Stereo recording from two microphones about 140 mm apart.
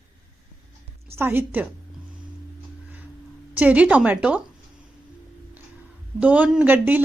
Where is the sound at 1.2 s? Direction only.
15° right (ahead or behind).